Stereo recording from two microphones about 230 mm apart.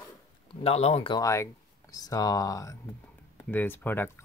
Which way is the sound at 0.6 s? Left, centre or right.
Left.